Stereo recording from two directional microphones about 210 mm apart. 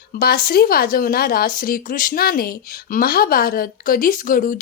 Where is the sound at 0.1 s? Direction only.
45° left (ahead or behind).